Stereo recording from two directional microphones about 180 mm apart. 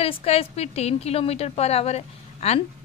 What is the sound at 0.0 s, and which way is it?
A woman's voice, 35° left (ahead or behind).